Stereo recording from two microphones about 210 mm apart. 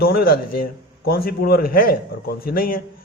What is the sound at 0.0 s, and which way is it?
A man's voice, 45° left (ahead or behind).